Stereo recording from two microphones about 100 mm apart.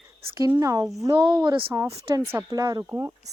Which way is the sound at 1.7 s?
35° right (ahead or behind).